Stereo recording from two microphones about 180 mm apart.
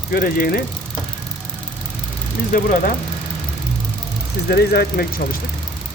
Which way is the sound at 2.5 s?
50° left (ahead or behind).